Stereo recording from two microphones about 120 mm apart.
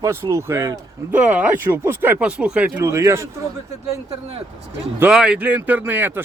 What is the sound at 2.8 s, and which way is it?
Speech, 25° right (ahead or behind).